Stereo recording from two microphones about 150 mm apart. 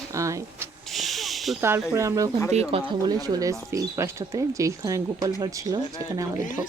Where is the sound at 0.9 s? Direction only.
Centre (ahead or behind).